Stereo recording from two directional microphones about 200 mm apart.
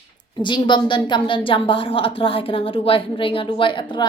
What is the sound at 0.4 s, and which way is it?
A woman's voice, 25° left (ahead or behind).